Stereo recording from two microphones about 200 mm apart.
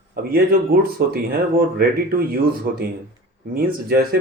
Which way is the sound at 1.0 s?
50° right (ahead or behind).